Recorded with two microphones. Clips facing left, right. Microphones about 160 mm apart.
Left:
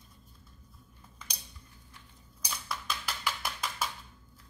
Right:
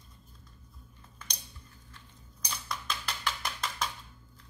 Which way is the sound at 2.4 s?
5° left (ahead or behind).